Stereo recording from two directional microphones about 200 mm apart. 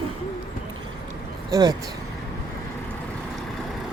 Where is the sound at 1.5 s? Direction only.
20° right (ahead or behind).